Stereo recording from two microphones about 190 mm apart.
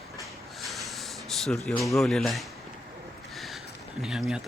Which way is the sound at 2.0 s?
Centre (ahead or behind).